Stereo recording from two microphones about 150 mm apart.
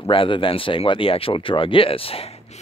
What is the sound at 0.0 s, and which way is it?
Speech, 35° left (ahead or behind).